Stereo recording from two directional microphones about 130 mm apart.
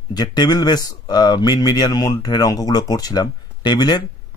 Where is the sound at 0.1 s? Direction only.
30° left (ahead or behind).